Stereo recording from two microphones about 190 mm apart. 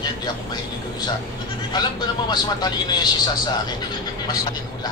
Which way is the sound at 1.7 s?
20° left (ahead or behind).